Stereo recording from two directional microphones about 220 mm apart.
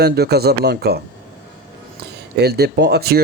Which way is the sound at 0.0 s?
45° right (ahead or behind).